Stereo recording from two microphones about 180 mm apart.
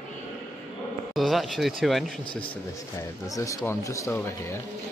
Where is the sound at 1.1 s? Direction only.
Centre (ahead or behind).